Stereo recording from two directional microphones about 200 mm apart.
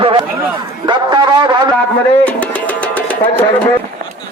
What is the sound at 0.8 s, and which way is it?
Music, 20° right (ahead or behind).